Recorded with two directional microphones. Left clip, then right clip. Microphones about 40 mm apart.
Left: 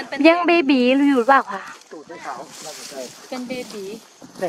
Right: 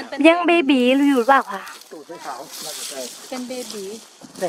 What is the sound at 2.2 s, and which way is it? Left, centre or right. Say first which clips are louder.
Speech: left 1 dB; left.